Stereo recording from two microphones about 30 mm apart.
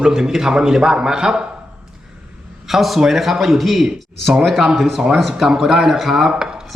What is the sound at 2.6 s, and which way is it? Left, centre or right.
A man's voice, centre.